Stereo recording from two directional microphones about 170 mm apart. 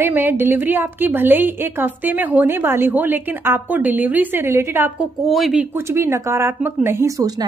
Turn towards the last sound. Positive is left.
turn(degrees=-20)  # may be behind; listen again after turning